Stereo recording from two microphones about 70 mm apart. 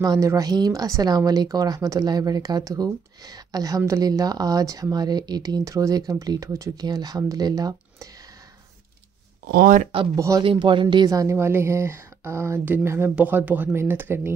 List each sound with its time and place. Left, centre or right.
0.0 s speech: right
1.1 s speech: right
4.9 s speech: right
5.6 s speech: right
10.1 s speech: right
10.6 s speech: right
11.1 s speech: right
11.3 s speech: right
13.1 s speech: right